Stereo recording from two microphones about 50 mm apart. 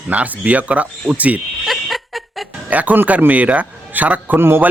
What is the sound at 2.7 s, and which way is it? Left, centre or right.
Speech, right.